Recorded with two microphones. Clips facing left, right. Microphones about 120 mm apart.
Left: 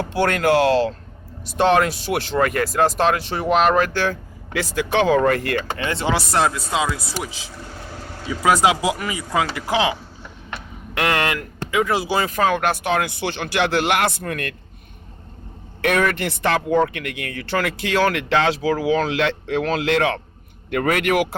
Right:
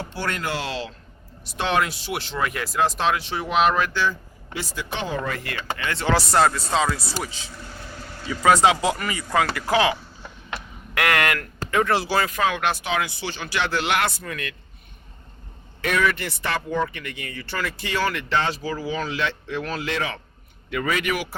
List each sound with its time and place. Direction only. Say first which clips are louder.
0.0 s speech: left 9 dB; 60° left (ahead or behind)
5.7 s speech: left 4 dB; 25° left (ahead or behind)
6.1 s speech: right 1 dB; centre (ahead or behind); by 11.4 s 25° left (ahead or behind)
11.7 s speech: left 1 dB; 10° left (ahead or behind)
12.3 s speech: left 4 dB; 40° left (ahead or behind)
15.8 s speech: left 3 dB; 55° left (ahead or behind)